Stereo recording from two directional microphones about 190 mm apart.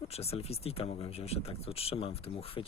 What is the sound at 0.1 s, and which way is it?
Speech, 30° left (ahead or behind).